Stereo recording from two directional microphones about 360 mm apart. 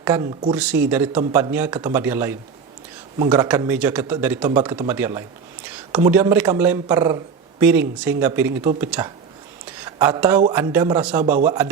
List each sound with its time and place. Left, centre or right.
0.0 s speech: centre